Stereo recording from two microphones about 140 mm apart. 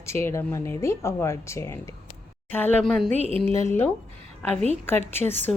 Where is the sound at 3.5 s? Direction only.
20° left (ahead or behind).